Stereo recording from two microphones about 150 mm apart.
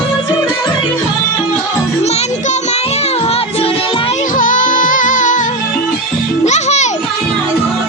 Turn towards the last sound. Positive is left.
turn(degrees=50)  # may be behind; listen again after turning